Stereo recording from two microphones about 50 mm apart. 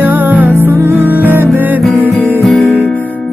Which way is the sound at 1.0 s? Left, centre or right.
Right.